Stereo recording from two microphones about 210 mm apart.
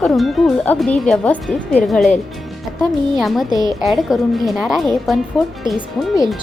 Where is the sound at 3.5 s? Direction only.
20° right (ahead or behind).